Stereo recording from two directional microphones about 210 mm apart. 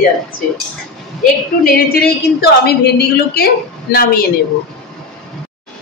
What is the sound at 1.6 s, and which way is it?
A man's voice, 45° left (ahead or behind).